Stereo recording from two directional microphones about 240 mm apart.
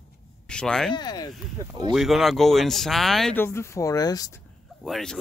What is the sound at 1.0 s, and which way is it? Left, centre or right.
Speech, centre.